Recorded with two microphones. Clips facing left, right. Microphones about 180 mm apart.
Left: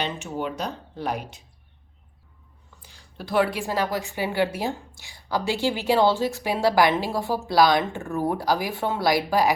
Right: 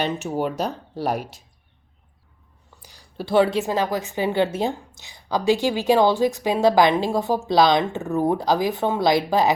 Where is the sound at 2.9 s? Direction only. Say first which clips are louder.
Right 5 dB; 30° right (ahead or behind).